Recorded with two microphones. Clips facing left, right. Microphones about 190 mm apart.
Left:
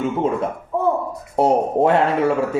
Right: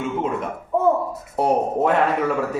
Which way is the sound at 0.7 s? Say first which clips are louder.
Right 2 dB; centre (ahead or behind).